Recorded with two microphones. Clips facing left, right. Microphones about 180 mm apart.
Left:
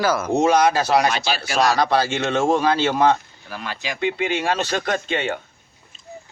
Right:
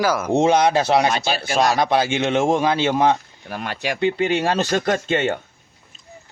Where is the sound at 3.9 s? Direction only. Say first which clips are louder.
Right 3 dB; 35° right (ahead or behind).